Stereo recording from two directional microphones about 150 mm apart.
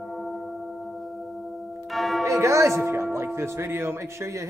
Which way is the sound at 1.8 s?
Centre (ahead or behind).